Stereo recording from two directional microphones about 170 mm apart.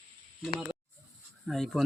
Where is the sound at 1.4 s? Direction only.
Centre (ahead or behind).